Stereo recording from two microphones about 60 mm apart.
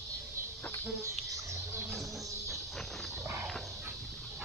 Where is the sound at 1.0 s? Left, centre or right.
Right.